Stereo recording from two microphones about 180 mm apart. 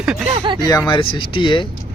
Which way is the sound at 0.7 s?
20° left (ahead or behind).